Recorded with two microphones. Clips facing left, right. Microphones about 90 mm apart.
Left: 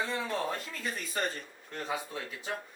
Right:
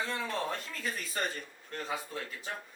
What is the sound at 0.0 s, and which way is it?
A man's voice, 5° left (ahead or behind).